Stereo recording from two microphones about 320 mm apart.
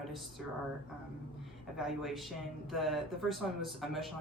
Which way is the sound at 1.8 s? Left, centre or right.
Centre.